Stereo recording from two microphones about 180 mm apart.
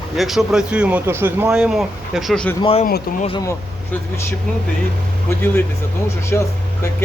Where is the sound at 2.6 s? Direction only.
30° left (ahead or behind).